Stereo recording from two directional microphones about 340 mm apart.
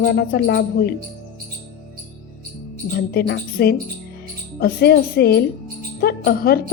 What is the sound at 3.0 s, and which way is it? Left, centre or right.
A woman's voice, left.